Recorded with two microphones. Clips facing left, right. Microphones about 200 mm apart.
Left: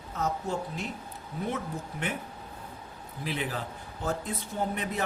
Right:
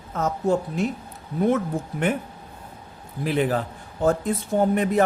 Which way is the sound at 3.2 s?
50° right (ahead or behind).